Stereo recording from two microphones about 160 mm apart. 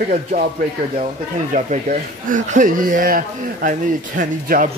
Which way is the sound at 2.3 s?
50° right (ahead or behind).